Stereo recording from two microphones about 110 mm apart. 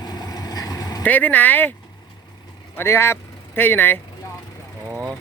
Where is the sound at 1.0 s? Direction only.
15° left (ahead or behind).